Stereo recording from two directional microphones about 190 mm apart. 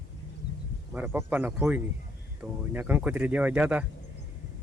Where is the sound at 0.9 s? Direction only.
10° right (ahead or behind).